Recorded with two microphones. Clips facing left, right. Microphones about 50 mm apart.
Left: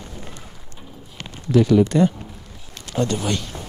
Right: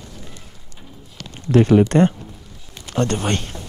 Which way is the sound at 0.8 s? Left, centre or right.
Centre.